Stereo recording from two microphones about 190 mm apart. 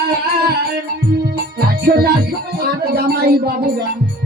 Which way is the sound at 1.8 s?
55° right (ahead or behind).